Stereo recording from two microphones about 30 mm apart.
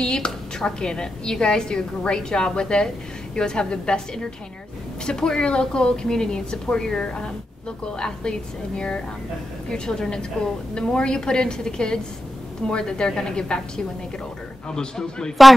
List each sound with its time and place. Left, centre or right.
0.0 s a sound: left
0.7 s a woman's voice: left
6.9 s a woman's voice: left
15.4 s speech: centre